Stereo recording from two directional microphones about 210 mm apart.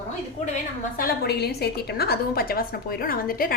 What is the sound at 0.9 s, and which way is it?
A woman's voice, 45° left (ahead or behind).